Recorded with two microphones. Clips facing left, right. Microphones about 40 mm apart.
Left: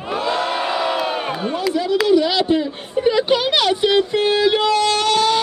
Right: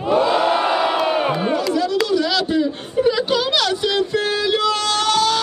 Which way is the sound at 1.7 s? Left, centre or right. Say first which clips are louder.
Left 7 dB; left.